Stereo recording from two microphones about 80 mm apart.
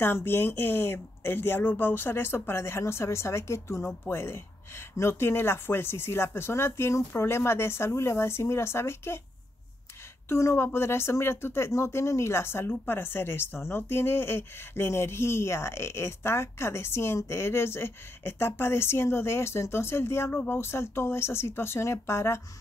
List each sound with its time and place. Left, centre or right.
0.0 s speech: left
10.2 s speech: left